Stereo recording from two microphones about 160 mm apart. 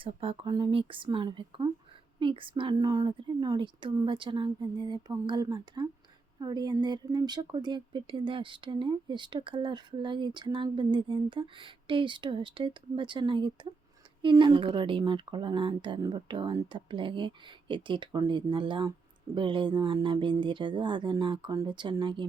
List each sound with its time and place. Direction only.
0.0 s a woman's voice: 35° right (ahead or behind)